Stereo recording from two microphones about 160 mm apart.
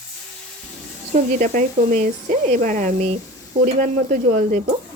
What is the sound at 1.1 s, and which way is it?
Speech, 55° right (ahead or behind).